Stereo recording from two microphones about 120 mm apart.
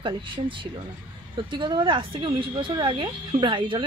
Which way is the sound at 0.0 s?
45° right (ahead or behind).